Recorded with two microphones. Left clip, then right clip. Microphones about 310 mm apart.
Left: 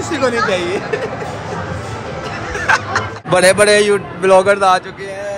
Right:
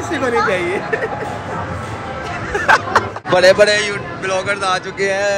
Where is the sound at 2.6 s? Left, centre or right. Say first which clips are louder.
Right 2 dB; centre.